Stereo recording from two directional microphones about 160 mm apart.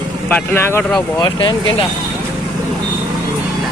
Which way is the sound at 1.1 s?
25° left (ahead or behind).